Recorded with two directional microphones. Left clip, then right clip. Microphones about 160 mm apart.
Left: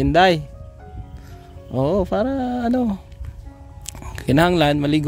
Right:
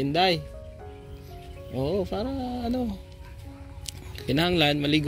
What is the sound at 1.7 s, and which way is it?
Speech, 55° left (ahead or behind).